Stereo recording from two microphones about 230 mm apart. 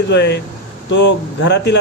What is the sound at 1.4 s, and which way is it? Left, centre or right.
Speech, left.